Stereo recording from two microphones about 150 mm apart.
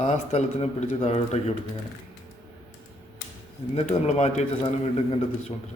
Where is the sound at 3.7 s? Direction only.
45° left (ahead or behind).